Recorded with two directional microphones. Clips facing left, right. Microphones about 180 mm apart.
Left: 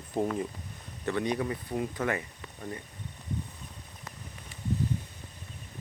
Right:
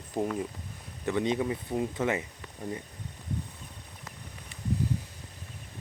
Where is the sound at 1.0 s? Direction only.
20° right (ahead or behind).